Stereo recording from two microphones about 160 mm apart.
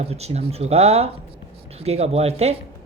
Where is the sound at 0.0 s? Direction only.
40° right (ahead or behind).